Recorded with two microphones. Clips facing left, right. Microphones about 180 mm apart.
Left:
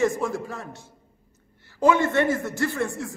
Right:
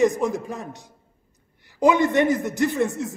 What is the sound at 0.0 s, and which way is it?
A man's voice, 20° right (ahead or behind).